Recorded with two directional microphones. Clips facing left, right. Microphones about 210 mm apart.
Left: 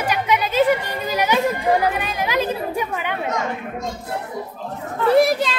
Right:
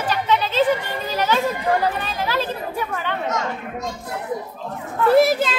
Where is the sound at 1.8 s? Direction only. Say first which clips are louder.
Left 1 dB; 15° left (ahead or behind).